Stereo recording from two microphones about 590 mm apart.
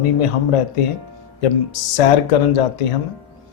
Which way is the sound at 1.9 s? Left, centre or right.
Left.